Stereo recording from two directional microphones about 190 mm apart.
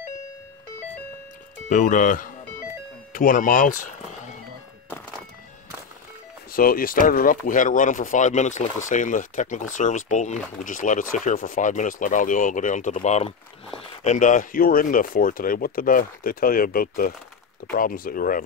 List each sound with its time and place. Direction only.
1.7 s speech: 40° left (ahead or behind)
6.5 s speech: 50° left (ahead or behind)